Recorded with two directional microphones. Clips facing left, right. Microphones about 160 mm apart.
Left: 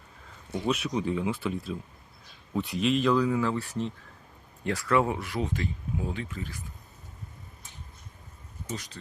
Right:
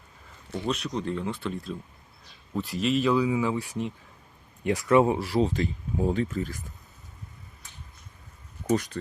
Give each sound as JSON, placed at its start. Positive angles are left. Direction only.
{"t": 0.5, "sound": "speech", "side_deg": 5}
{"t": 8.6, "sound": "speech", "side_deg": -55}